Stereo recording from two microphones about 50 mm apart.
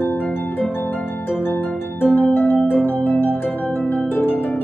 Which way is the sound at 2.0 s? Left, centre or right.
Left.